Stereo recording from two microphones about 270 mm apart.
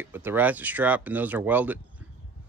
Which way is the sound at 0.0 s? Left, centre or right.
Centre.